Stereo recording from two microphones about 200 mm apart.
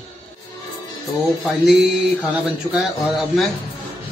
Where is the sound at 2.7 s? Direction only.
Centre (ahead or behind).